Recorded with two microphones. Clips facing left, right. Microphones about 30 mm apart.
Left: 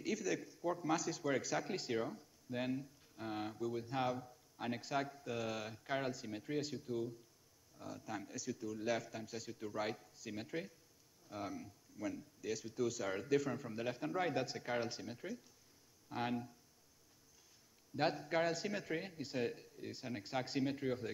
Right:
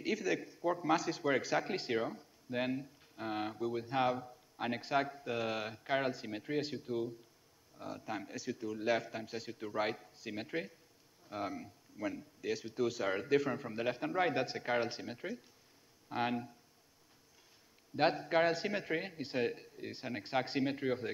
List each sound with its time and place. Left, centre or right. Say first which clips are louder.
0.0 s a man's voice: right 4 dB; right
17.9 s a man's voice: right 5 dB; right